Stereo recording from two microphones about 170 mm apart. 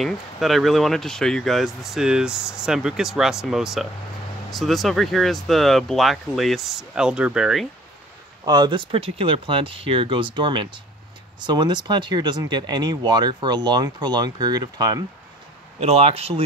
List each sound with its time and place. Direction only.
0.0 s speech: centre (ahead or behind)
8.5 s speech: 25° right (ahead or behind)
15.8 s speech: 40° right (ahead or behind)